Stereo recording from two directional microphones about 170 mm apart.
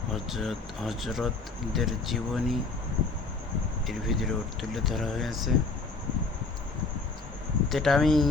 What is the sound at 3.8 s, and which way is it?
Speech, centre (ahead or behind).